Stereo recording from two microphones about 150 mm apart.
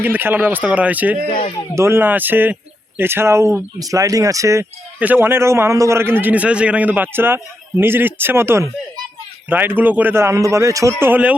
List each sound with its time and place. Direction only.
0.0 s a man's voice: 15° right (ahead or behind)
1.3 s speech: 40° left (ahead or behind)
1.7 s a man's voice: 15° right (ahead or behind)